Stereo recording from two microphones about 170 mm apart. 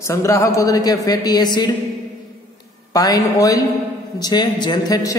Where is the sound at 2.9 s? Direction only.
20° left (ahead or behind).